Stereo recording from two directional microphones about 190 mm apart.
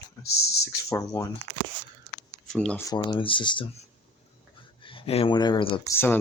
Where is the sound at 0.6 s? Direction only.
15° left (ahead or behind).